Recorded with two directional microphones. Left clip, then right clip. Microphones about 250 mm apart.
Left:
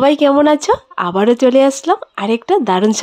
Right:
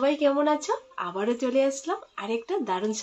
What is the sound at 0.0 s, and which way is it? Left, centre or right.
Speech, left.